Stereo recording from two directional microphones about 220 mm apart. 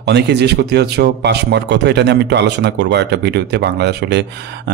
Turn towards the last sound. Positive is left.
turn(degrees=-50)  # may be behind; listen again after turning